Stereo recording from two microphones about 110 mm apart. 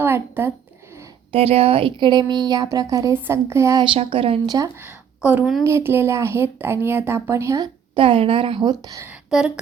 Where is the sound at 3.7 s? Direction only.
50° right (ahead or behind).